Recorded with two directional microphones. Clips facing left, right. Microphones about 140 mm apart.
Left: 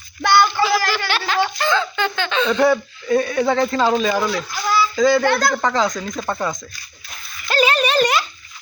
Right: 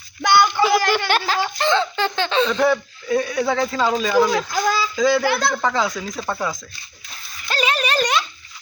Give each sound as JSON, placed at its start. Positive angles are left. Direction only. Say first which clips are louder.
{"t": 0.2, "sound": "a sound", "louder": "even", "side_deg": -15}
{"t": 1.3, "sound": "giggle", "louder": "left 4 dB", "side_deg": -25}
{"t": 2.5, "sound": "a man's voice", "louder": "left 2 dB", "side_deg": 0}
{"t": 4.3, "sound": "a child's voice", "louder": "right 4 dB", "side_deg": -45}
{"t": 4.9, "sound": "a man's voice", "louder": "left 3 dB", "side_deg": -5}
{"t": 7.4, "sound": "a sound", "louder": "left 4 dB", "side_deg": 0}